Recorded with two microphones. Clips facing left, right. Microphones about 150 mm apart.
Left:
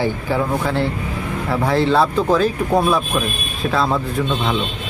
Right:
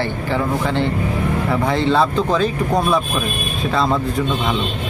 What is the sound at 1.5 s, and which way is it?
Speech, centre (ahead or behind).